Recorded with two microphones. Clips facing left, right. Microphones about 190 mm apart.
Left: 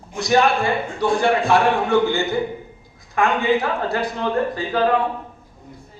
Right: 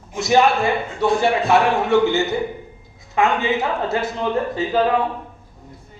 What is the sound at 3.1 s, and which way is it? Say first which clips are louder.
A man's voice: even; 20° right (ahead or behind).